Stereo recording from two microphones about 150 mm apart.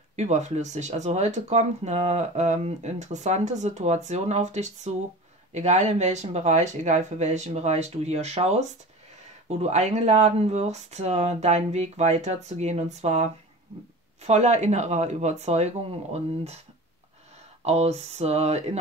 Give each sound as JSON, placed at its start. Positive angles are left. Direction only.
{"t": 0.1, "sound": "speech", "side_deg": -50}
{"t": 17.6, "sound": "speech", "side_deg": -45}